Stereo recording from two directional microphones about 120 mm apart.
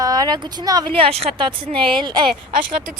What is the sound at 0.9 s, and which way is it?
Speech, 55° right (ahead or behind).